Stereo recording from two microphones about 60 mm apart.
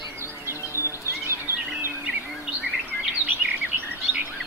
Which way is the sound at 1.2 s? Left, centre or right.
Right.